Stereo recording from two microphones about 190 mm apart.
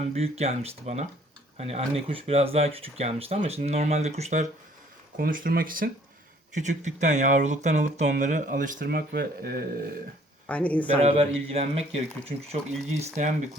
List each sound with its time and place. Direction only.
0.1 s speech: 35° right (ahead or behind)
5.1 s speech: 50° right (ahead or behind)
6.5 s speech: 40° right (ahead or behind)
10.4 s speech: 10° left (ahead or behind)
10.9 s speech: 35° right (ahead or behind)